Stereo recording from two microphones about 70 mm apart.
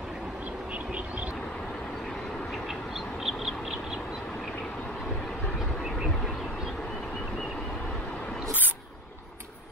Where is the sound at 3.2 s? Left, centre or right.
Centre.